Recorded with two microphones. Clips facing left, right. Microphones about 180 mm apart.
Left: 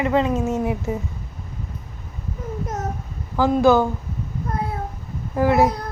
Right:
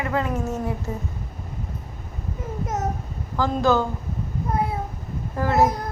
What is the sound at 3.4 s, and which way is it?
Speech, 15° left (ahead or behind).